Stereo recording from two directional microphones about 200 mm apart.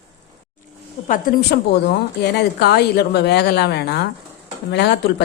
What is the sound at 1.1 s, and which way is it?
A woman's voice, 45° left (ahead or behind).